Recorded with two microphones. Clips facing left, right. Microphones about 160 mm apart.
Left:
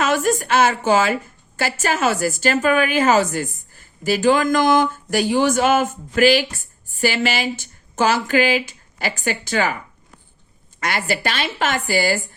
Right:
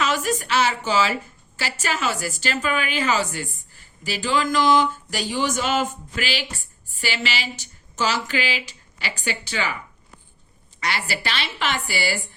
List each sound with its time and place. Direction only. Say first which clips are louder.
0.0 s a woman's voice: left 5 dB; 50° left (ahead or behind)
10.8 s a woman's voice: left 5 dB; 50° left (ahead or behind)